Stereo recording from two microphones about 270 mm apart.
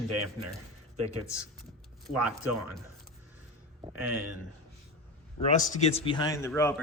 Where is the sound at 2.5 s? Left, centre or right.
Right.